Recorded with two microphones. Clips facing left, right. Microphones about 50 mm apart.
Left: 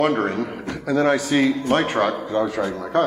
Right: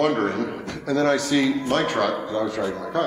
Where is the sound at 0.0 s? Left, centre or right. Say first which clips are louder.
Left 1 dB; left.